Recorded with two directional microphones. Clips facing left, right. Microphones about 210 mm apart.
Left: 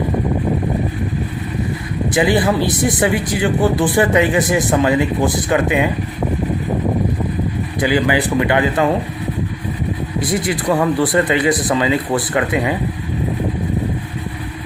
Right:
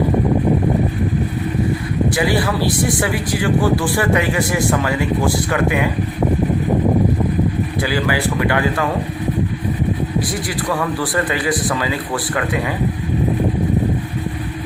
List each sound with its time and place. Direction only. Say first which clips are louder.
2.1 s speech: left 7 dB; 20° left (ahead or behind)
7.8 s speech: left 5 dB; 15° left (ahead or behind)
10.2 s speech: left 2 dB; 25° left (ahead or behind)